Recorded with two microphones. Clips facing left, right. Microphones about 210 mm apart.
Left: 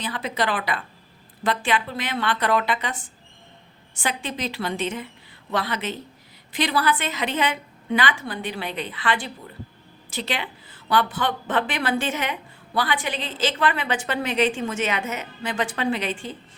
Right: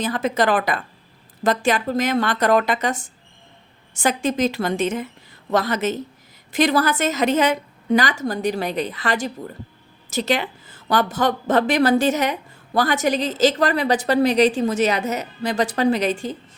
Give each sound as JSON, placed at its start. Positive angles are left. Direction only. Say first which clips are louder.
{"t": 0.0, "sound": "a woman's voice", "louder": "right 6 dB", "side_deg": -45}